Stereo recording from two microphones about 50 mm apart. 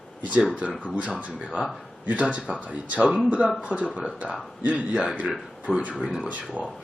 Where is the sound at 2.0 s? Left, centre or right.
Right.